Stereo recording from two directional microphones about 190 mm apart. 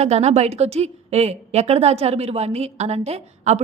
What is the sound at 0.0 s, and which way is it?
A woman's voice, 35° right (ahead or behind).